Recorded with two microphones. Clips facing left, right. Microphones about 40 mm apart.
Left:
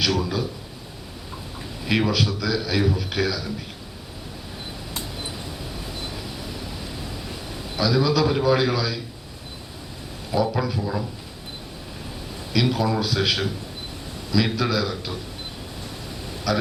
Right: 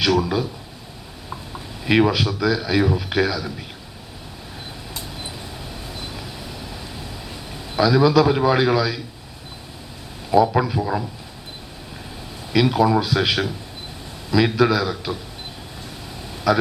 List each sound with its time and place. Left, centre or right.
0.0 s a man's voice: centre
1.8 s a man's voice: centre
7.8 s a man's voice: centre
10.5 s a man's voice: centre
12.5 s a man's voice: centre
16.5 s a man's voice: centre